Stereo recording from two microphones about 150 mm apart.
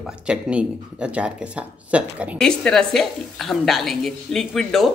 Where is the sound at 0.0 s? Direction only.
5° right (ahead or behind).